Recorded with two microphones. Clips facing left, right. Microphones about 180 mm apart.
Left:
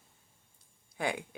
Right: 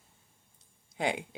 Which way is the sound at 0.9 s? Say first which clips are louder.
Right 2 dB; 20° right (ahead or behind).